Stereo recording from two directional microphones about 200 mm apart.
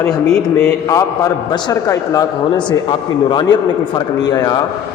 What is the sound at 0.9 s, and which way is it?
A man's voice, 15° left (ahead or behind).